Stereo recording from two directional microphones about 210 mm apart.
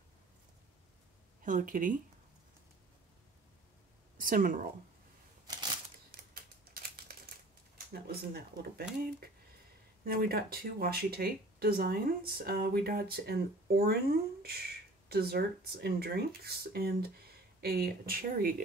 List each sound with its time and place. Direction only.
1.4 s speech: 40° right (ahead or behind)
4.2 s speech: 40° right (ahead or behind)
6.3 s typing: 45° right (ahead or behind)
7.7 s speech: 45° right (ahead or behind)
10.0 s speech: 45° right (ahead or behind)